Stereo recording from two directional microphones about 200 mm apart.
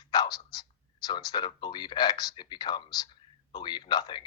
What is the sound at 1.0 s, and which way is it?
Speech, 20° left (ahead or behind).